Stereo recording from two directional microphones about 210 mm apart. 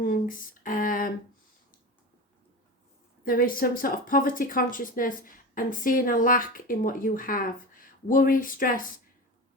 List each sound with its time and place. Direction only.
0.0 s a woman's voice: 40° left (ahead or behind)
3.2 s a woman's voice: 45° left (ahead or behind)